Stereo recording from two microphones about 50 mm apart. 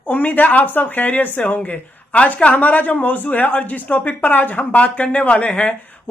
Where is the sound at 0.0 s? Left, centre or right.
Left.